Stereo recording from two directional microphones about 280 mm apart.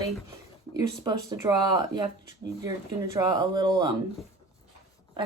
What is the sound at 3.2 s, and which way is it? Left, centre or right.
Speech, centre.